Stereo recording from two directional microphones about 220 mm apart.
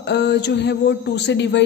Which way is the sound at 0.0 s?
50° left (ahead or behind).